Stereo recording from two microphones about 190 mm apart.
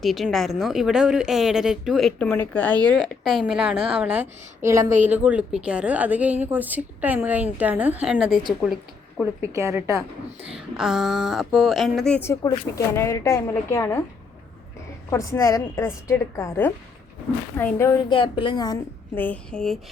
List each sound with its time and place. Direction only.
0.0 s a woman's voice: centre (ahead or behind)
9.4 s a woman's voice: 15° right (ahead or behind)
10.6 s a woman's voice: centre (ahead or behind); by 14.0 s 15° left (ahead or behind)
15.1 s a woman's voice: 15° left (ahead or behind)
18.1 s speech: 25° left (ahead or behind)
19.1 s a woman's voice: 10° left (ahead or behind)